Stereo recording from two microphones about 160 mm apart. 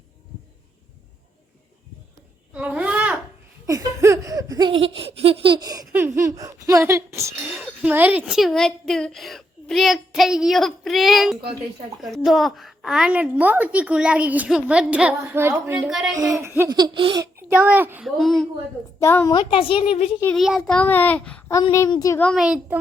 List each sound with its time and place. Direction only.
2.5 s babbling: 10° right (ahead or behind)
3.7 s laughter: 20° right (ahead or behind)
5.9 s a sound: 15° right (ahead or behind)
7.4 s a child's voice: 5° right (ahead or behind)
15.9 s a child's voice: centre (ahead or behind)
16.1 s laughter: 20° right (ahead or behind)
17.5 s a woman's voice: 10° right (ahead or behind)
18.2 s a child's voice: centre (ahead or behind)
18.9 s a child's voice: 15° left (ahead or behind)
19.3 s a child's voice: 30° left (ahead or behind)
20.3 s a child's voice: centre (ahead or behind)
21.6 s a woman's voice: 25° left (ahead or behind)
22.2 s a child's voice: 5° left (ahead or behind)
22.4 s a child's voice: 5° right (ahead or behind)